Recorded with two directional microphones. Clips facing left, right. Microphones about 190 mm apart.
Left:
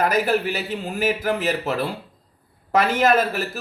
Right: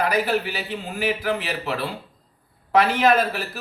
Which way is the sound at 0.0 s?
45° left (ahead or behind).